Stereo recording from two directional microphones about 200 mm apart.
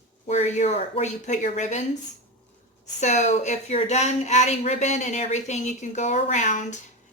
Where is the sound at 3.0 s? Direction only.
35° left (ahead or behind).